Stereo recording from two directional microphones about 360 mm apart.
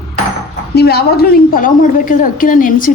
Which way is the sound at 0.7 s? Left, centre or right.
Left.